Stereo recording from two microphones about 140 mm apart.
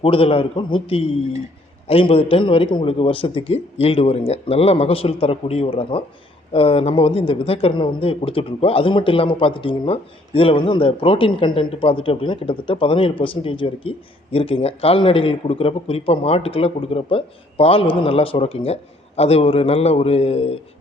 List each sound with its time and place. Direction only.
0.0 s speech: 40° left (ahead or behind)